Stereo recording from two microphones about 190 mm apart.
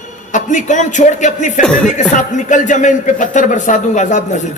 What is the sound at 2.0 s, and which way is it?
A man's voice, 40° left (ahead or behind).